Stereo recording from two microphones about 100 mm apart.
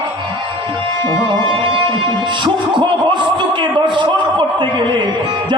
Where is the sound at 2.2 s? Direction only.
50° right (ahead or behind).